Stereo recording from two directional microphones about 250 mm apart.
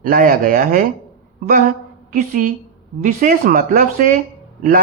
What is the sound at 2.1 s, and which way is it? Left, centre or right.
Speech, right.